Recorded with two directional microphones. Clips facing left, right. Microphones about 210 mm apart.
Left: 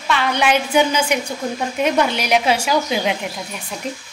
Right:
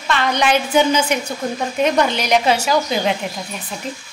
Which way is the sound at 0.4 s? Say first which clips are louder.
Right 1 dB; 10° left (ahead or behind).